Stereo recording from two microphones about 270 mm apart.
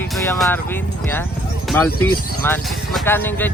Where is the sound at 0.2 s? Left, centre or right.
Centre.